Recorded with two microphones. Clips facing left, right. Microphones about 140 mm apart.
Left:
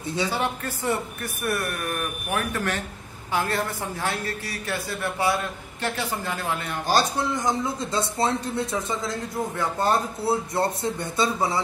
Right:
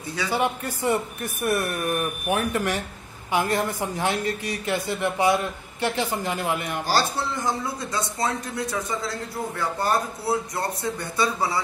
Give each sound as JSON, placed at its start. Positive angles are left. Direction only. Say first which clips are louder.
{"t": 0.3, "sound": "a man's voice", "louder": "right 3 dB", "side_deg": -15}
{"t": 6.9, "sound": "a man's voice", "louder": "left 2 dB", "side_deg": 20}